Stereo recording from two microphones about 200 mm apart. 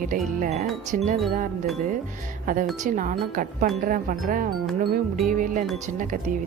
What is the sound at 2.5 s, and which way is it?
A woman's voice, 40° right (ahead or behind).